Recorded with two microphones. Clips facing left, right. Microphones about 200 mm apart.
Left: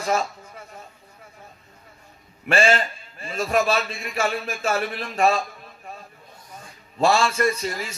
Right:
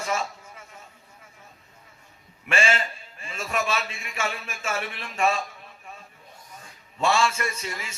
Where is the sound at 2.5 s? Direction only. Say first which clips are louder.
Left 5 dB; 35° left (ahead or behind).